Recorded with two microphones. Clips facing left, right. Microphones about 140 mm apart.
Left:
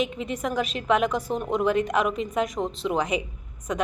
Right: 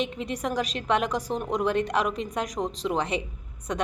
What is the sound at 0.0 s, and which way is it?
A woman's voice, 5° left (ahead or behind).